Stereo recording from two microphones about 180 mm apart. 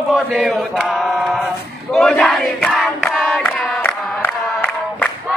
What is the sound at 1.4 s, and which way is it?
Crowd, 5° left (ahead or behind).